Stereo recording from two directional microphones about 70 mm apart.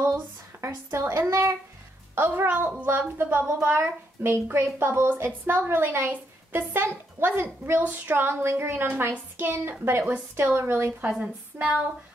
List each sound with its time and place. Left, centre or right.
0.0 s a sound: right
0.9 s a woman's voice: right
2.1 s a woman's voice: right